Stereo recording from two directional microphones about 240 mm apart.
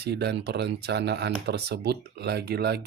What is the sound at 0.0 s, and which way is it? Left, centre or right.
Speech, right.